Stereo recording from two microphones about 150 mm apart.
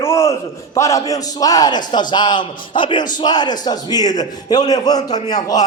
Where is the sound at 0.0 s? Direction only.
20° left (ahead or behind).